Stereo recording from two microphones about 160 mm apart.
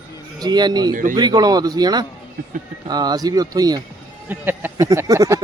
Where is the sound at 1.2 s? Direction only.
25° right (ahead or behind).